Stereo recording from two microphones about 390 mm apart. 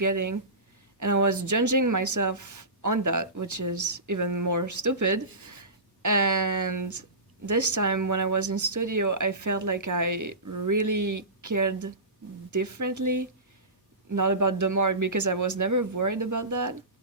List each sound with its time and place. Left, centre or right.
0.0 s speech: right